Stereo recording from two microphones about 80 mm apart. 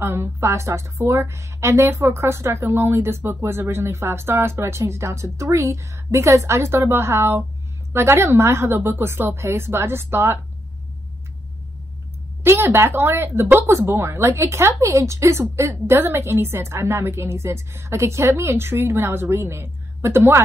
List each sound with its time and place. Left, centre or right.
0.0 s speech: right
12.4 s speech: right